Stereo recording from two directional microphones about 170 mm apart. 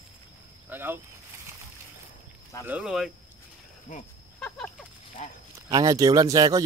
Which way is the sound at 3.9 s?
50° left (ahead or behind).